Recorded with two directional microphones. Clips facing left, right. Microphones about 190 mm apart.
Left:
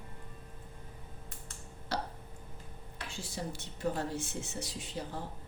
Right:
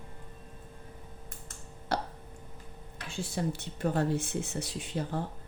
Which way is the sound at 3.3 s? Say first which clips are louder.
Right 8 dB; 60° right (ahead or behind).